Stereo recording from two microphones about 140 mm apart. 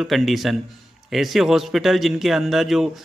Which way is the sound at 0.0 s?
Centre (ahead or behind).